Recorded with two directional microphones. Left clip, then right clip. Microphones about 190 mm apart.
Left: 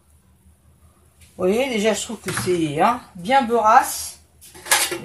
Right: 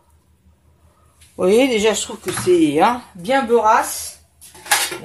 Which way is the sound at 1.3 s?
50° right (ahead or behind).